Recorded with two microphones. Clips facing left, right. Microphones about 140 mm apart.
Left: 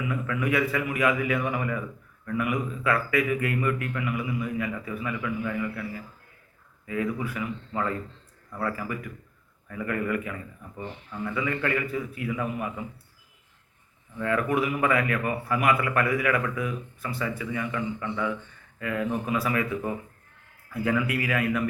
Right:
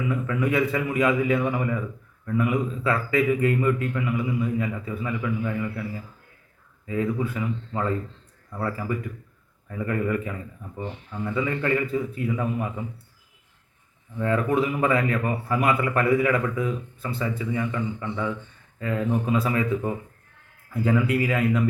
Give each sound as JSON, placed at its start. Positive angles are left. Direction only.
{"t": 0.3, "sound": "a man's voice", "side_deg": -25}
{"t": 6.8, "sound": "a man's voice", "side_deg": -25}
{"t": 14.2, "sound": "a man's voice", "side_deg": -25}